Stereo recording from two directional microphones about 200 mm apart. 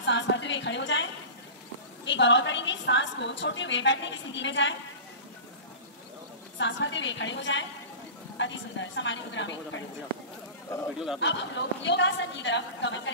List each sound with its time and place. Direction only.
0.0 s a sound: 65° left (ahead or behind)
2.0 s a woman's voice: 65° left (ahead or behind)
6.6 s a woman's voice: 65° left (ahead or behind)
11.1 s a woman's voice: 65° left (ahead or behind)